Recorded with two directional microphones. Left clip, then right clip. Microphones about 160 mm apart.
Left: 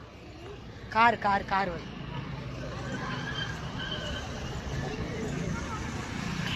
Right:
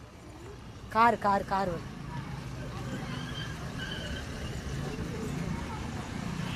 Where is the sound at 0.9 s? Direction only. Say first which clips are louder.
Left 1 dB; 60° right (ahead or behind).